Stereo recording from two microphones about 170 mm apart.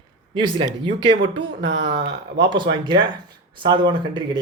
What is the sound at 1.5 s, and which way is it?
Speech, 90° right.